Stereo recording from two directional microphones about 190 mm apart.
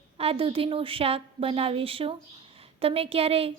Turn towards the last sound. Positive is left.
turn(degrees=-30)  # may be behind; listen again after turning